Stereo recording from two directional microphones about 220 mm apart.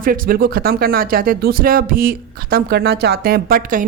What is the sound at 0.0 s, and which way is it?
A woman's voice, 40° right (ahead or behind).